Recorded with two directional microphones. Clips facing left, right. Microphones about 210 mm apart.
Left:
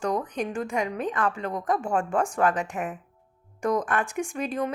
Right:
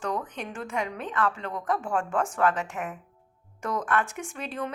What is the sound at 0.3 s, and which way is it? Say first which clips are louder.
A woman's voice: left 6 dB; 15° left (ahead or behind).